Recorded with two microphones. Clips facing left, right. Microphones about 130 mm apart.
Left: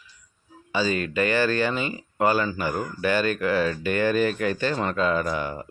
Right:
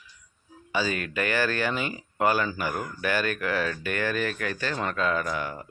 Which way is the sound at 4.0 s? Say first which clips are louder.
Left 7 dB; 25° left (ahead or behind).